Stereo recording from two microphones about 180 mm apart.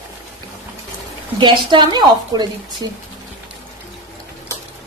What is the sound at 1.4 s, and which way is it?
A woman's voice, 25° right (ahead or behind).